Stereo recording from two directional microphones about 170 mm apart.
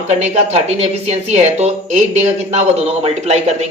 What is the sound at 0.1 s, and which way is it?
Speech, 40° right (ahead or behind).